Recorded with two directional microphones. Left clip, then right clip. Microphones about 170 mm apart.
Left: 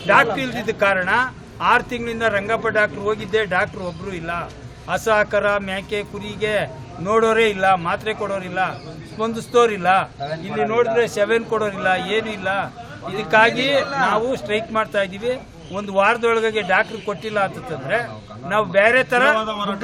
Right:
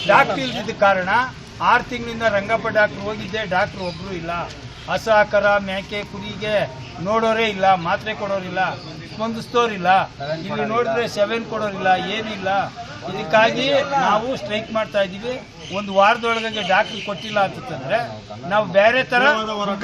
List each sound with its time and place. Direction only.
0.4 s a man's voice: 15° left (ahead or behind)
4.9 s a man's voice: 15° left (ahead or behind)
19.4 s a man's voice: 25° left (ahead or behind)